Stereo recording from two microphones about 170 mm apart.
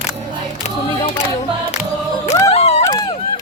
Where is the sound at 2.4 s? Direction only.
40° left (ahead or behind).